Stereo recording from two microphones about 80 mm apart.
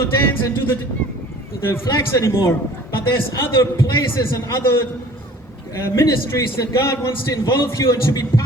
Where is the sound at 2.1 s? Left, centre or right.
Left.